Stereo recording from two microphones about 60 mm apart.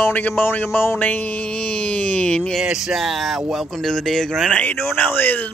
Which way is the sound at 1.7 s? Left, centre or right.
Left.